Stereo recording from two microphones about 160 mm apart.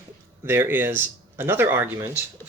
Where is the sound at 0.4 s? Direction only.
15° right (ahead or behind).